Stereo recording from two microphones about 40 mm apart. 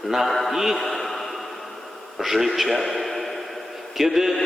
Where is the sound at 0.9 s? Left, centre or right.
Centre.